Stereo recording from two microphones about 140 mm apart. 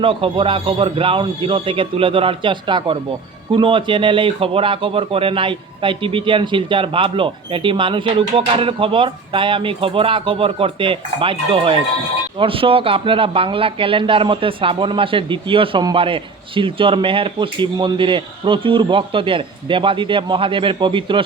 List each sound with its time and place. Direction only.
0.0 s speech: 40° right (ahead or behind)